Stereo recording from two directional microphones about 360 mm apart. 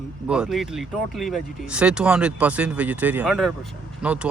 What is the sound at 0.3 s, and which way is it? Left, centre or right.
Speech, centre.